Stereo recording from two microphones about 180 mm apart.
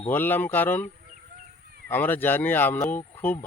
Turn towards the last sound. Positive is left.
turn(degrees=10)  # may be behind; listen again after turning